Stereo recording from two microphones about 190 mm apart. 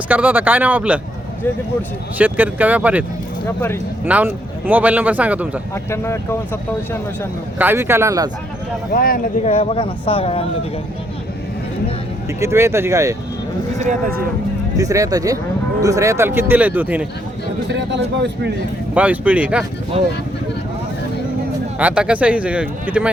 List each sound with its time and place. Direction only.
0.1 s speech: 10° right (ahead or behind)
2.1 s speech: 10° right (ahead or behind)
4.0 s speech: 10° right (ahead or behind)
5.7 s speech: 15° left (ahead or behind)
7.6 s speech: 10° right (ahead or behind)
8.9 s speech: 50° left (ahead or behind)
9.5 s speech: 30° left (ahead or behind)
12.4 s speech: 15° right (ahead or behind)
14.8 s speech: 15° right (ahead or behind)
17.7 s speech: 65° right (ahead or behind)
18.9 s speech: 10° right (ahead or behind)
19.9 s speech: 30° right (ahead or behind)
21.8 s speech: 5° right (ahead or behind)